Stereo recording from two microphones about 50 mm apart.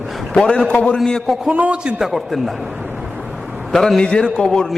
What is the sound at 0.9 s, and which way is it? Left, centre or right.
Speech, centre.